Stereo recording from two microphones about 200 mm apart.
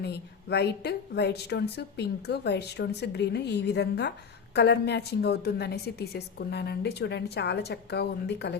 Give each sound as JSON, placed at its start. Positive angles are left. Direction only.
{"t": 0.0, "sound": "speech", "side_deg": 55}